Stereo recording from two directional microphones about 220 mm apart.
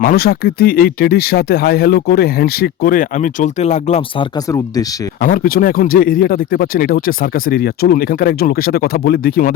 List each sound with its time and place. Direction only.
0.0 s speech: 40° left (ahead or behind)
4.4 s speech: 15° left (ahead or behind)
5.2 s speech: 40° left (ahead or behind)